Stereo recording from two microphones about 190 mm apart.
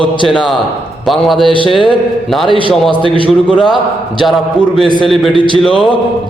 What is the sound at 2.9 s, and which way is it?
Speech, 25° right (ahead or behind).